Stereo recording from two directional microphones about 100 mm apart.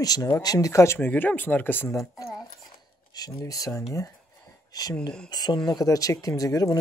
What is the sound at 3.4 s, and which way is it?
Speech, 35° left (ahead or behind).